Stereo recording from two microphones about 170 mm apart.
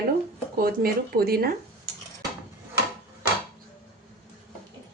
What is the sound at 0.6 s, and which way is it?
Speech, 60° right (ahead or behind).